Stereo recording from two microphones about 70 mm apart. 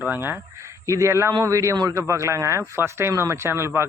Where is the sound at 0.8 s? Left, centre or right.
Right.